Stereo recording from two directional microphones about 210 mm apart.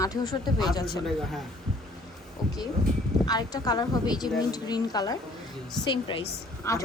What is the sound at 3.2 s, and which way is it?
A woman's voice, 20° left (ahead or behind).